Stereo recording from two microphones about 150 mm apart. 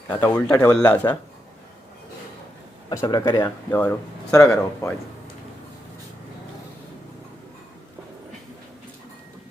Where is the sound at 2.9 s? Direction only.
20° left (ahead or behind).